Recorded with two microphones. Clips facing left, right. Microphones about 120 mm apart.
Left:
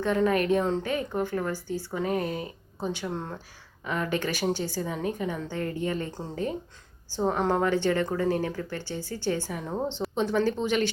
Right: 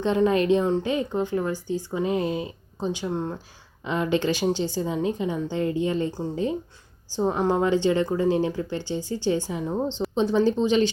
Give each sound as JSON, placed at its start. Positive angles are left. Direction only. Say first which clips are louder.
{"t": 0.0, "sound": "a woman's voice", "louder": "right 3 dB", "side_deg": -20}
{"t": 7.2, "sound": "a woman's voice", "louder": "right 3 dB", "side_deg": -15}